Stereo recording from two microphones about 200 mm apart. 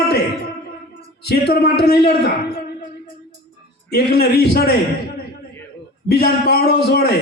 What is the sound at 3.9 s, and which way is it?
Speech, 55° left (ahead or behind).